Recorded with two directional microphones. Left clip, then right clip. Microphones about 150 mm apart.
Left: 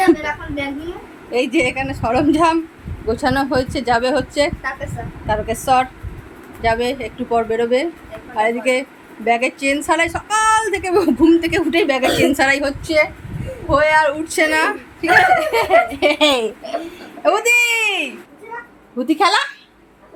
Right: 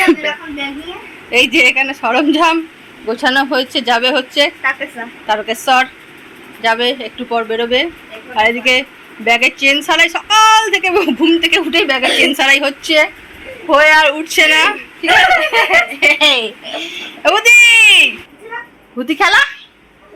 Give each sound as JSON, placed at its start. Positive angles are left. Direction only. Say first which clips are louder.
{"t": 1.3, "sound": "a child's voice", "louder": "right 8 dB", "side_deg": 5}
{"t": 3.2, "sound": "a woman's voice", "louder": "right 5 dB", "side_deg": 15}
{"t": 7.2, "sound": "a woman's voice", "louder": "left 2 dB", "side_deg": 15}
{"t": 12.8, "sound": "speech", "louder": "right 4 dB", "side_deg": -10}
{"t": 14.3, "sound": "a woman's voice", "louder": "right 6 dB", "side_deg": 10}
{"t": 16.0, "sound": "a woman's voice", "louder": "right 5 dB", "side_deg": 55}
{"t": 16.7, "sound": "a child's voice", "louder": "right 3 dB", "side_deg": 10}